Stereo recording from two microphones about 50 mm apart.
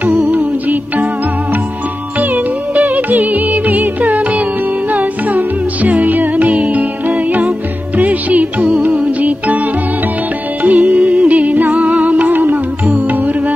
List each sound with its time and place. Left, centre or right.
0.0 s music: right
2.7 s music: right
10.6 s music: right
11.0 s music: right